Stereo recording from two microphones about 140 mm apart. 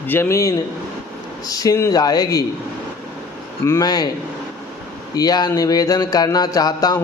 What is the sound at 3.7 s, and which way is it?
Speech, 25° left (ahead or behind).